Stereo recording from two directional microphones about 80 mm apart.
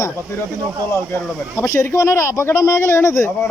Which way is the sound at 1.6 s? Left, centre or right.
Left.